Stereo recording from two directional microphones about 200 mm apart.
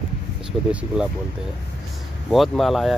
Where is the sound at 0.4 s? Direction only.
5° right (ahead or behind).